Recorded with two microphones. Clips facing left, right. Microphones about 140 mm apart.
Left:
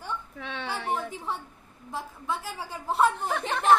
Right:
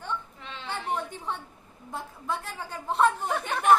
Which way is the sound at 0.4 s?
70° left (ahead or behind).